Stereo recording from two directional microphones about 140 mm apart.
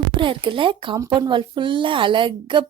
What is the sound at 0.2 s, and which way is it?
Speech, 35° right (ahead or behind).